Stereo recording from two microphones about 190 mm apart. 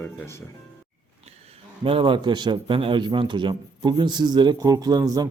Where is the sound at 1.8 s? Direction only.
25° right (ahead or behind).